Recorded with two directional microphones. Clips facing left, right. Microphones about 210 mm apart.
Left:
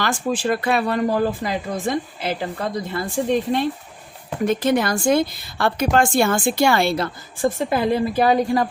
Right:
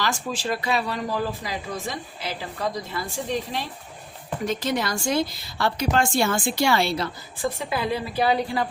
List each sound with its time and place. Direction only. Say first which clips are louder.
0.0 s a woman's voice: left 6 dB; 55° left (ahead or behind)